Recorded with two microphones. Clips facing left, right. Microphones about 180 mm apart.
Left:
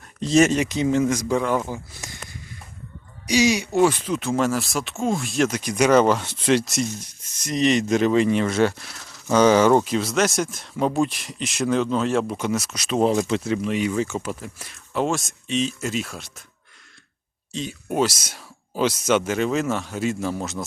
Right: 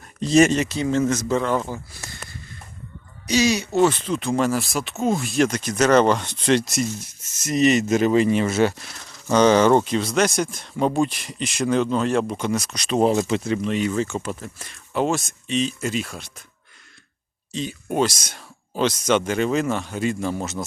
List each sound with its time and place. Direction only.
0.2 s speech: centre (ahead or behind)
0.5 s speech: 15° left (ahead or behind)
1.9 s a sound: 15° left (ahead or behind)
3.2 s speech: 15° left (ahead or behind)
17.5 s speech: centre (ahead or behind)